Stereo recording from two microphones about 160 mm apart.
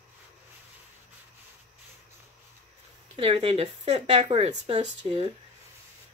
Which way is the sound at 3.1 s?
35° right (ahead or behind).